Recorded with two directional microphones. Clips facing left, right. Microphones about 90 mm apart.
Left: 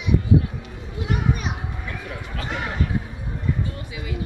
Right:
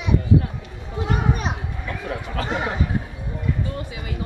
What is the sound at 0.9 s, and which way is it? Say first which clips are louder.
Children playing: right 2 dB; 35° right (ahead or behind).